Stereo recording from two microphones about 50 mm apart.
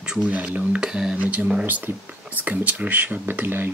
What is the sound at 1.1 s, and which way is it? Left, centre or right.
Speech, right.